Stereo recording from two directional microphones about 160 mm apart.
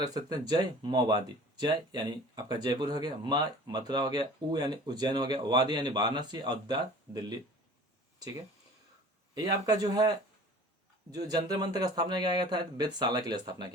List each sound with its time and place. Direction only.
0.0 s speech: 25° right (ahead or behind)
9.3 s speech: 25° right (ahead or behind)
11.1 s speech: 25° right (ahead or behind)